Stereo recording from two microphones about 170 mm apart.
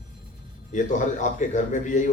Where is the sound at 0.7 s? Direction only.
45° left (ahead or behind).